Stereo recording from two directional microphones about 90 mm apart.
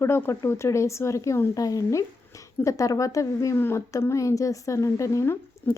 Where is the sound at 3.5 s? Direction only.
25° left (ahead or behind).